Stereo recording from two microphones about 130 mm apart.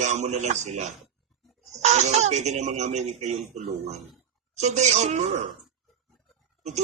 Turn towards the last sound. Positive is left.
turn(degrees=-65)  # may be behind; listen again after turning